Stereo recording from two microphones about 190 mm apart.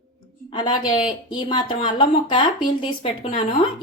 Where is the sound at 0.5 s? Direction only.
25° left (ahead or behind).